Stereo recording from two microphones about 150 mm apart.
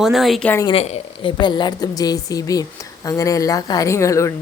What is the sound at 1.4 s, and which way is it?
A woman's voice, 30° left (ahead or behind).